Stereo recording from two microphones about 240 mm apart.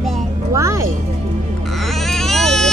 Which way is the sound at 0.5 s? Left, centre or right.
Centre.